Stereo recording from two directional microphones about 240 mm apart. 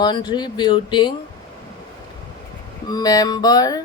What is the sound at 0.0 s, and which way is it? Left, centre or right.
Speech, centre.